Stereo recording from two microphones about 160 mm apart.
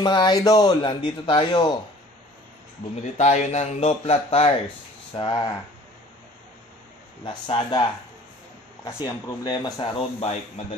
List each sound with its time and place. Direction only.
0.0 s speech: 30° left (ahead or behind)
3.2 s speech: 45° left (ahead or behind); by 5.5 s 30° left (ahead or behind)
7.2 s speech: 30° left (ahead or behind)